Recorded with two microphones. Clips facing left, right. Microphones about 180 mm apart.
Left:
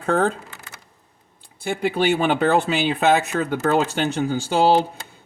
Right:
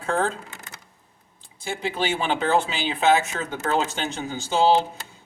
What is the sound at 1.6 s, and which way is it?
Speech, 60° left (ahead or behind).